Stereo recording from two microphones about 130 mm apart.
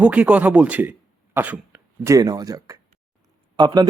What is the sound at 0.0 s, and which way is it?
A man's voice, 10° right (ahead or behind).